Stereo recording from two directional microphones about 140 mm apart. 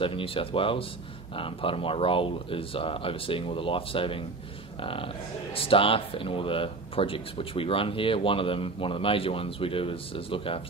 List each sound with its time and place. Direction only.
0.0 s speech: 40° left (ahead or behind)